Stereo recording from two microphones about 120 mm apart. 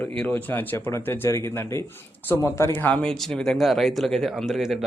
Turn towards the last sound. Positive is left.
turn(degrees=-5)  # may be behind; listen again after turning